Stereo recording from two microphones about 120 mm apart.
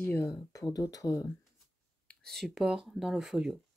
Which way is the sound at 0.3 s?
30° left (ahead or behind).